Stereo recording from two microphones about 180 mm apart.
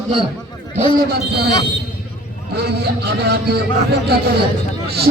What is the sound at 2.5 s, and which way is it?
A man's voice, 65° right (ahead or behind).